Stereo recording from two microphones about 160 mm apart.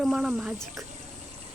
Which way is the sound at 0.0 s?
Centre (ahead or behind).